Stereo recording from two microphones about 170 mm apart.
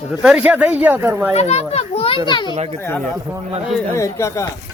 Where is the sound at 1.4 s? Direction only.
40° left (ahead or behind).